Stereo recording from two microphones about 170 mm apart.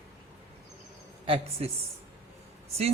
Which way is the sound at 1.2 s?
30° right (ahead or behind).